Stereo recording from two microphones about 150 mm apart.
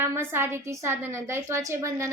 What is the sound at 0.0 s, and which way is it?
A woman's voice, 15° right (ahead or behind).